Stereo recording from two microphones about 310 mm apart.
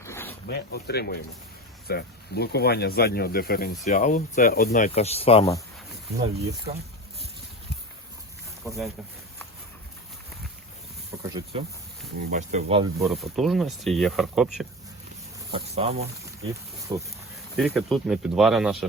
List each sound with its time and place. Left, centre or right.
0.0 s a sound: centre
0.4 s speech: left; by 5.6 s centre
6.7 s speech: right
8.6 s speech: centre
11.1 s speech: centre
12.3 s speech: right
13.1 s speech: centre
15.5 s speech: centre
17.6 s speech: centre